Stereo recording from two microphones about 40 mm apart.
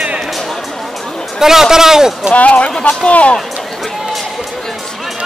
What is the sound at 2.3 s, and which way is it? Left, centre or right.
Speech, left.